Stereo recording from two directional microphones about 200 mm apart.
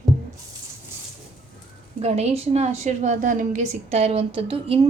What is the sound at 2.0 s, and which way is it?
A woman's voice, 35° right (ahead or behind).